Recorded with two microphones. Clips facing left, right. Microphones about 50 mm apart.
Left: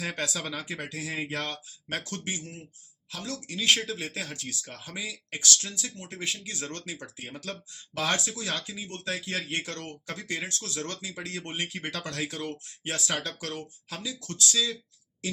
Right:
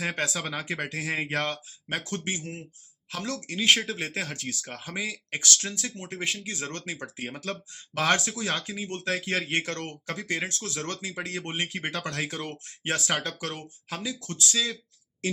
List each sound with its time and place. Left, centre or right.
0.0 s speech: right
0.6 s speech: right
2.0 s speech: right
3.6 s speech: right
6.9 s speech: right
8.9 s speech: right
10.1 s speech: right